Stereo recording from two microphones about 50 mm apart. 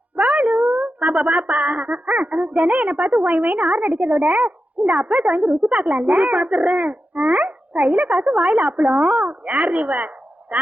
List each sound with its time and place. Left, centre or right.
0.2 s speech: right